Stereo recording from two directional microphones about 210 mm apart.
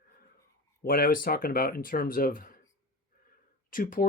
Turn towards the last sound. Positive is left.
turn(degrees=40)  # may be behind; listen again after turning